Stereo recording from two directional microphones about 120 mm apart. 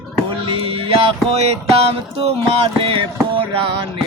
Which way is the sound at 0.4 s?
50° right (ahead or behind).